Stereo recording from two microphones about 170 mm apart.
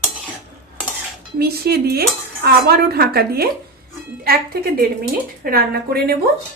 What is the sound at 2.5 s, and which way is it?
Speech, 65° right (ahead or behind).